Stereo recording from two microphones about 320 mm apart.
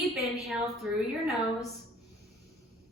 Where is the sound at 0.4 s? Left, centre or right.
Centre.